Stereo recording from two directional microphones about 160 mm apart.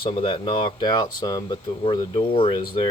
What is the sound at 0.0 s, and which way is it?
Speech, 35° left (ahead or behind).